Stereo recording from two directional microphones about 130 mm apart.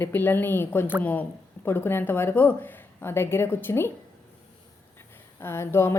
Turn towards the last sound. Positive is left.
turn(degrees=20)  # may be behind; listen again after turning